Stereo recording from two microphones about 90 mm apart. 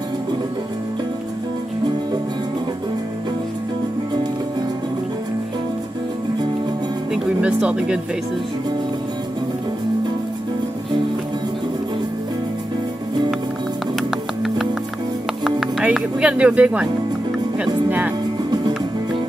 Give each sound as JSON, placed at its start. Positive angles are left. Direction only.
{"t": 7.2, "sound": "speech", "side_deg": -10}
{"t": 15.8, "sound": "speech", "side_deg": -15}
{"t": 17.8, "sound": "speech", "side_deg": -15}